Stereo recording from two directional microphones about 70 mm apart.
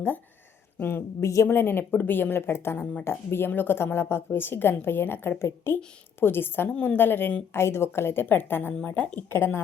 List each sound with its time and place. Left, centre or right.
0.8 s speech: left
3.0 s speech: left